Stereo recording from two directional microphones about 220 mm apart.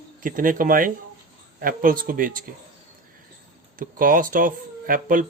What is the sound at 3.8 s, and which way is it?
Speech, 40° right (ahead or behind).